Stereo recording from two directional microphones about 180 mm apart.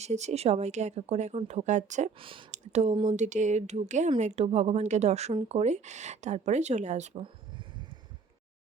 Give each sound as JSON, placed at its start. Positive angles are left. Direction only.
{"t": 0.0, "sound": "speech", "side_deg": -40}
{"t": 2.2, "sound": "speech", "side_deg": -30}
{"t": 3.1, "sound": "speech", "side_deg": -45}